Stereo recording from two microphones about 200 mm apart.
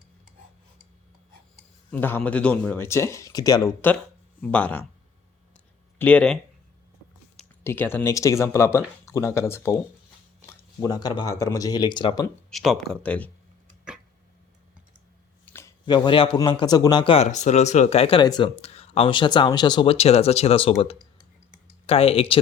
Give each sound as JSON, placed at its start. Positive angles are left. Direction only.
{"t": 1.9, "sound": "speech", "side_deg": 10}
{"t": 6.0, "sound": "speech", "side_deg": 5}
{"t": 7.6, "sound": "speech", "side_deg": 10}
{"t": 10.8, "sound": "speech", "side_deg": 20}
{"t": 12.5, "sound": "speech", "side_deg": 0}
{"t": 13.9, "sound": "a sound", "side_deg": -5}
{"t": 15.4, "sound": "speech", "side_deg": 15}